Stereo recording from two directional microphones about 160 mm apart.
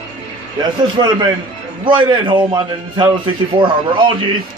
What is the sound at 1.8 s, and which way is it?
A man's voice, 30° right (ahead or behind).